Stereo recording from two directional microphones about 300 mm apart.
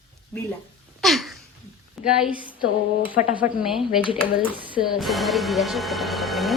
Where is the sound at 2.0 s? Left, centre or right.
Centre.